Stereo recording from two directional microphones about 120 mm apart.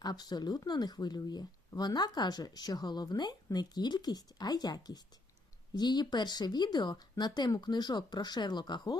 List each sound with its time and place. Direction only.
0.0 s speech: 35° left (ahead or behind)